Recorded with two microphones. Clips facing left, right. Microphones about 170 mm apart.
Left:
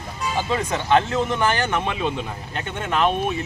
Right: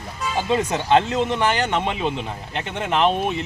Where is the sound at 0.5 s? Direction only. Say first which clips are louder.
Right 2 dB; 20° right (ahead or behind).